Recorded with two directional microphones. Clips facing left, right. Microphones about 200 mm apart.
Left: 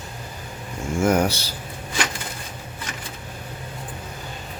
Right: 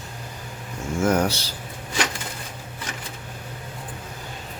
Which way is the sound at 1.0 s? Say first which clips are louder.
Left 1 dB; 10° left (ahead or behind).